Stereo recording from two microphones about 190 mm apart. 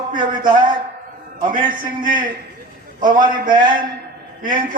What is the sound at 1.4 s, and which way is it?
A man's voice, 45° right (ahead or behind).